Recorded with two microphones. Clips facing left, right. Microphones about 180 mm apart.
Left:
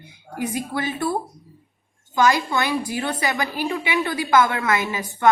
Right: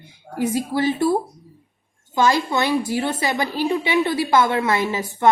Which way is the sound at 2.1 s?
25° right (ahead or behind).